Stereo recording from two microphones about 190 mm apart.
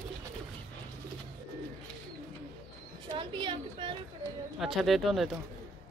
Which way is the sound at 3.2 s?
25° right (ahead or behind).